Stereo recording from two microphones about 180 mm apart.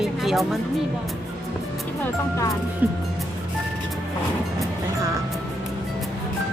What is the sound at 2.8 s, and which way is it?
Speech, 10° right (ahead or behind).